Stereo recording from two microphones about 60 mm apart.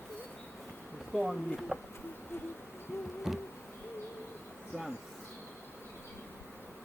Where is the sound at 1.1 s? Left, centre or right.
Centre.